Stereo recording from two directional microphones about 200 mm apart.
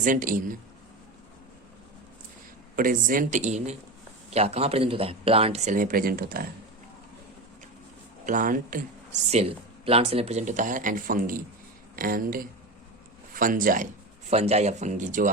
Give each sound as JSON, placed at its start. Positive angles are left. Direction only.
{"t": 0.0, "sound": "speech", "side_deg": -40}
{"t": 2.7, "sound": "speech", "side_deg": -45}
{"t": 8.3, "sound": "speech", "side_deg": -40}
{"t": 14.3, "sound": "speech", "side_deg": -30}